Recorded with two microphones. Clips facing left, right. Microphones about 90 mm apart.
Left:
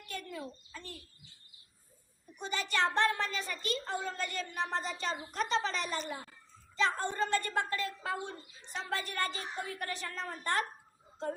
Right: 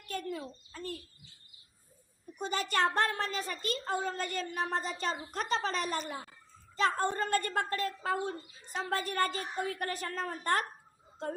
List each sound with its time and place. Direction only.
0.1 s bird: 40° right (ahead or behind)
2.4 s a child's voice: 45° right (ahead or behind)